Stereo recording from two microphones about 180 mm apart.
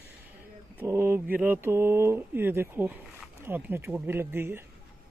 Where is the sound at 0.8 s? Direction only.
15° right (ahead or behind).